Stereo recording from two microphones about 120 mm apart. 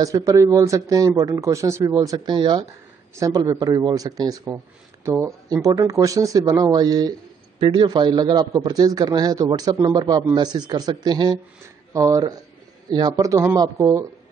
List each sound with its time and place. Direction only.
0.0 s speech: 25° right (ahead or behind)
2.0 s a man's voice: 40° right (ahead or behind)
5.0 s speech: 20° right (ahead or behind)
5.5 s a man's voice: 30° right (ahead or behind)
7.5 s a man's voice: 45° right (ahead or behind); by 14.0 s 30° right (ahead or behind)